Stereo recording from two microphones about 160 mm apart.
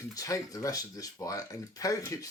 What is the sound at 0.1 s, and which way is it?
Speech, 20° left (ahead or behind).